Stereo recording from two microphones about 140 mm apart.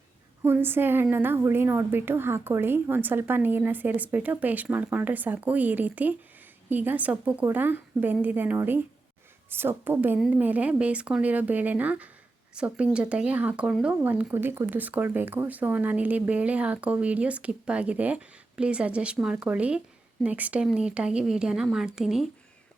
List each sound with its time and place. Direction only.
0.4 s a woman's voice: 15° right (ahead or behind)